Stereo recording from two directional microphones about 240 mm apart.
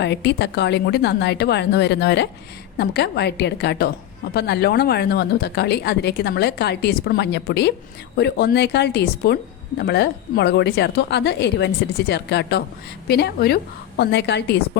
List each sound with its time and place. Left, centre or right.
0.0 s speech: left